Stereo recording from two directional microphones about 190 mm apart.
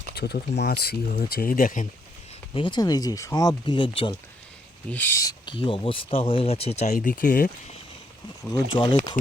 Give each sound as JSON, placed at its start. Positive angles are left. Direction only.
{"t": 0.2, "sound": "speech", "side_deg": 60}
{"t": 2.6, "sound": "speech", "side_deg": 25}
{"t": 4.9, "sound": "speech", "side_deg": 10}
{"t": 8.7, "sound": "speech", "side_deg": 25}